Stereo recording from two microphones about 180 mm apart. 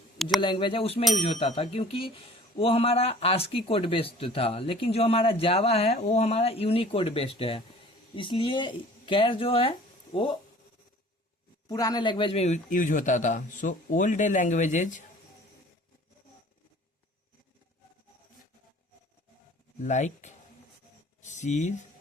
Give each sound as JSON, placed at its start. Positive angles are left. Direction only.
{"t": 0.3, "sound": "speech", "side_deg": 25}
{"t": 11.7, "sound": "speech", "side_deg": 20}
{"t": 19.8, "sound": "speech", "side_deg": 40}
{"t": 21.2, "sound": "a sound", "side_deg": 40}